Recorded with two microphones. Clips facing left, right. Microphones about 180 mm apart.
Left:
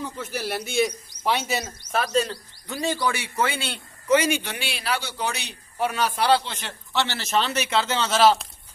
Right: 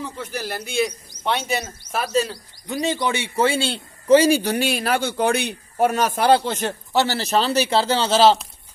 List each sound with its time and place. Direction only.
0.2 s a man's voice: 5° left (ahead or behind)
1.8 s a man's voice: 5° right (ahead or behind); by 8.4 s 30° right (ahead or behind)